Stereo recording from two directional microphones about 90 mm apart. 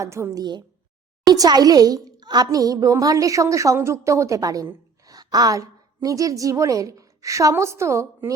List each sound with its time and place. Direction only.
0.0 s a child's voice: 35° right (ahead or behind)
1.3 s a child's voice: 50° right (ahead or behind); by 8.3 s 30° right (ahead or behind)